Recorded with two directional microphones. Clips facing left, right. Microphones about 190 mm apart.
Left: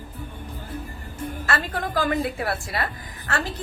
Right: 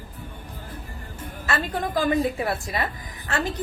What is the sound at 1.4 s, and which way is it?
A woman's voice, 20° right (ahead or behind).